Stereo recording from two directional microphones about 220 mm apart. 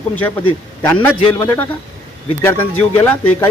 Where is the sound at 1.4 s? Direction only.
10° left (ahead or behind).